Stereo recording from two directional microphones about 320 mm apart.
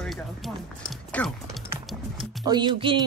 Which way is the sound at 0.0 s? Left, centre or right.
Centre.